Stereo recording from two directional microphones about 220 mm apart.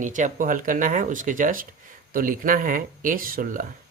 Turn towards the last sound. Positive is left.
turn(degrees=-40)  # may be behind; listen again after turning